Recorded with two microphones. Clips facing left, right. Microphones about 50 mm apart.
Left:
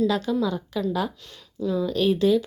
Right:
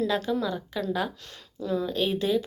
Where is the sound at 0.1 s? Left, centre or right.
Right.